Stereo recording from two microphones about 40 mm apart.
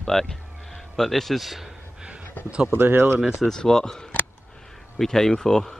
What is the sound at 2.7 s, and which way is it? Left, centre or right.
Speech, right.